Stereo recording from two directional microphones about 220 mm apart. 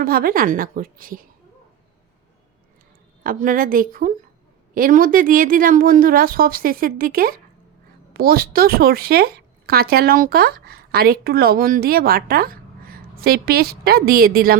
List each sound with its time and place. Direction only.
0.0 s speech: 40° right (ahead or behind)
3.2 s speech: 40° right (ahead or behind)